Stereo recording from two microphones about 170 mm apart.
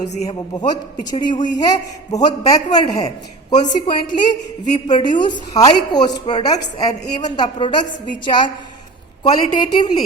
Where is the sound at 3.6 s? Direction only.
25° left (ahead or behind).